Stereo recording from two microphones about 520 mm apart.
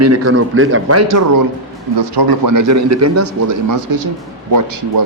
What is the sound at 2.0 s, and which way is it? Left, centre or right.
A man's voice, right.